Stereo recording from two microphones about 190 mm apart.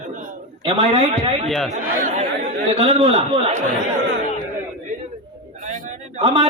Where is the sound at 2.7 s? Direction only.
30° right (ahead or behind).